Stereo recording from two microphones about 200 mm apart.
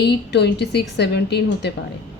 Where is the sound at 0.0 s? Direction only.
55° left (ahead or behind).